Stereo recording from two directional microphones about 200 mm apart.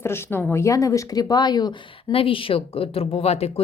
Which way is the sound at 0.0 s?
10° left (ahead or behind).